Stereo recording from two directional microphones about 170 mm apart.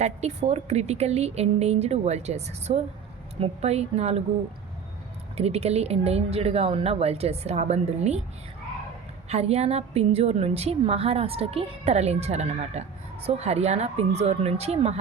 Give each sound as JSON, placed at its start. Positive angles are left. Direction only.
{"t": 0.0, "sound": "a woman's voice", "side_deg": -40}
{"t": 5.4, "sound": "a woman's voice", "side_deg": -35}
{"t": 9.3, "sound": "a woman's voice", "side_deg": -40}